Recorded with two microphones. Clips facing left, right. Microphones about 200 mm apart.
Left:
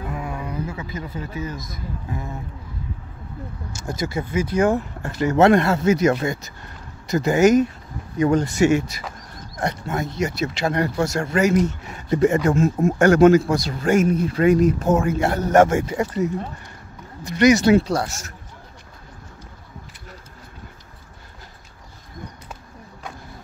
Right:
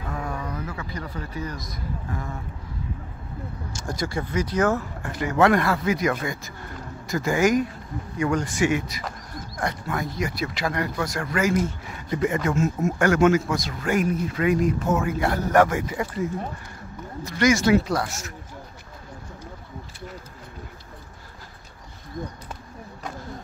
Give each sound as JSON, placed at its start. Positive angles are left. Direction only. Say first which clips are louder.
{"t": 0.1, "sound": "a sound", "louder": "right 2 dB", "side_deg": 10}
{"t": 0.7, "sound": "speech", "louder": "left 2 dB", "side_deg": 25}
{"t": 3.8, "sound": "speech", "louder": "left 2 dB", "side_deg": 20}
{"t": 5.0, "sound": "speech", "louder": "left 6 dB", "side_deg": 40}
{"t": 5.4, "sound": "speech", "louder": "left 4 dB", "side_deg": 25}
{"t": 8.5, "sound": "speech", "louder": "left 5 dB", "side_deg": 40}
{"t": 9.6, "sound": "speech", "louder": "left 3 dB", "side_deg": 25}
{"t": 12.2, "sound": "speech", "louder": "left 5 dB", "side_deg": 40}
{"t": 17.4, "sound": "speech", "louder": "left 4 dB", "side_deg": 25}